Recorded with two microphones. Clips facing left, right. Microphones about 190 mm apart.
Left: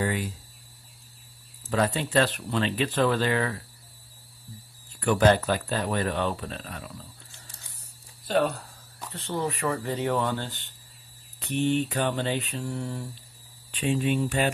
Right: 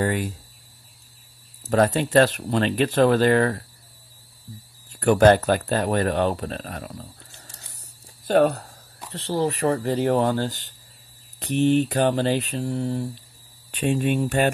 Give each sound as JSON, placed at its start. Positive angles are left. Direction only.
{"t": 0.0, "sound": "speech", "side_deg": -50}
{"t": 1.7, "sound": "speech", "side_deg": -45}
{"t": 5.0, "sound": "speech", "side_deg": -45}
{"t": 8.3, "sound": "speech", "side_deg": -50}
{"t": 9.1, "sound": "mantra", "side_deg": -35}
{"t": 13.7, "sound": "speech", "side_deg": -50}